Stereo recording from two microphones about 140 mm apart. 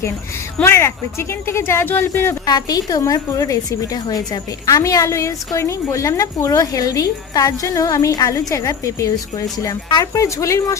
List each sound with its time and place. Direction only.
0.6 s speech: 15° left (ahead or behind)
2.5 s a woman's voice: 30° left (ahead or behind)